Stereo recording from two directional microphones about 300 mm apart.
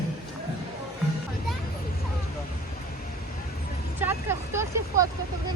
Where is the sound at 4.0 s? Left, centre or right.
Centre.